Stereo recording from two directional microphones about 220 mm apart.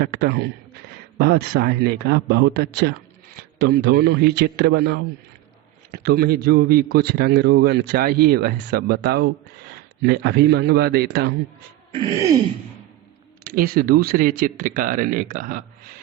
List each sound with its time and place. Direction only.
0.0 s a man's voice: 45° right (ahead or behind)
11.9 s throat clearing: 20° right (ahead or behind)
13.4 s speech: 40° right (ahead or behind)